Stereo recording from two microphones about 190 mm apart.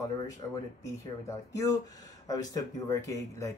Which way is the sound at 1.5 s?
15° left (ahead or behind).